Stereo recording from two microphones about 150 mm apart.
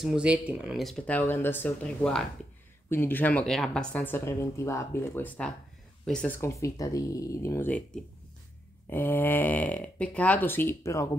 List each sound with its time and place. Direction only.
0.0 s speech: 5° right (ahead or behind); by 7.7 s 20° left (ahead or behind)
8.9 s speech: 15° left (ahead or behind)